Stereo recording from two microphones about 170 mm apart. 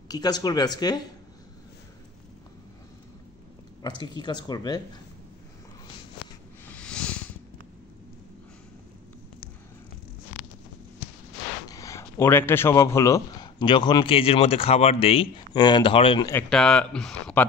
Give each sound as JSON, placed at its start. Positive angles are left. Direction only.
{"t": 0.1, "sound": "speech", "side_deg": 25}
{"t": 4.2, "sound": "speech", "side_deg": 25}
{"t": 6.7, "sound": "a sound", "side_deg": 5}
{"t": 11.6, "sound": "speech", "side_deg": 20}
{"t": 16.4, "sound": "speech", "side_deg": 5}